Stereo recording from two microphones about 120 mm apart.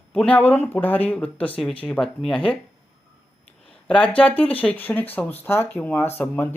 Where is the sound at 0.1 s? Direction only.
10° left (ahead or behind).